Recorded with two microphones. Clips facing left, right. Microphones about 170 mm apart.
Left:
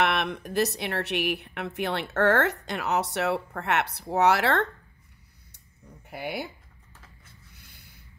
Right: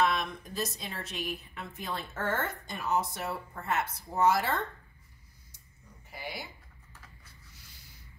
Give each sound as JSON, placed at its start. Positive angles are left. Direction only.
{"t": 0.0, "sound": "a woman's voice", "side_deg": 70}
{"t": 6.0, "sound": "speech", "side_deg": 60}
{"t": 7.5, "sound": "a sound", "side_deg": 60}